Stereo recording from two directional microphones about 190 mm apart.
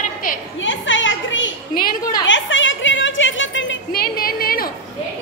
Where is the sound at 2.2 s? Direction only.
80° left.